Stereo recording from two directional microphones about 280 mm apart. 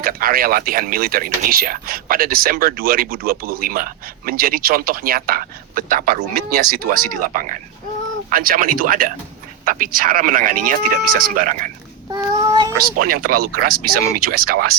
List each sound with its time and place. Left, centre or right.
0.0 s speech: right
12.1 s child singing: centre
13.2 s speech: right